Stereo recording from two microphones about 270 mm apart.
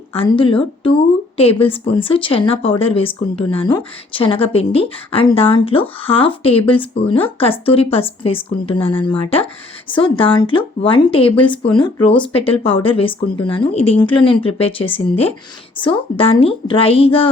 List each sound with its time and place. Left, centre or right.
0.1 s a woman's voice: centre